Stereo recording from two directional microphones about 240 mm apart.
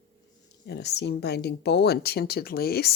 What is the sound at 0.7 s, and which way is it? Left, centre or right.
Speech, left.